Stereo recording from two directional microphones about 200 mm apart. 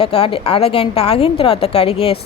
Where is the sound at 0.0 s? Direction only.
30° left (ahead or behind).